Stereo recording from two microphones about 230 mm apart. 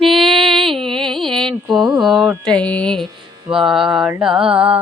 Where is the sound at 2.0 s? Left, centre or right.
Centre.